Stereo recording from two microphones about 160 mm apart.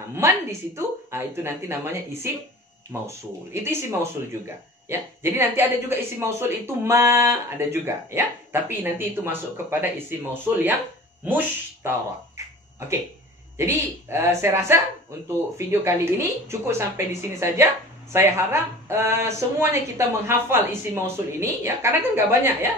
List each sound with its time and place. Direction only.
0.1 s a woman's voice: 15° right (ahead or behind)
4.8 s a woman's voice: 15° right (ahead or behind)
13.6 s a woman's voice: 15° right (ahead or behind)